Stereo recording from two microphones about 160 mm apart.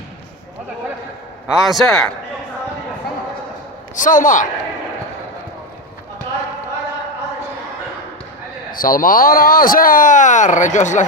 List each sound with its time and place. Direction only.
1.5 s a man's voice: centre (ahead or behind)
3.9 s speech: 55° left (ahead or behind)
8.7 s speech: 60° left (ahead or behind)